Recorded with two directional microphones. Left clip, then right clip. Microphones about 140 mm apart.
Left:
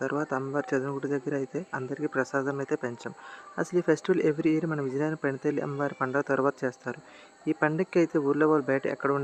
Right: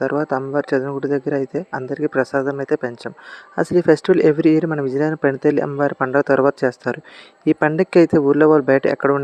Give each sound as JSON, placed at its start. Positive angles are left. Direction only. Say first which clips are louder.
{"t": 0.0, "sound": "speech", "louder": "right 10 dB", "side_deg": -35}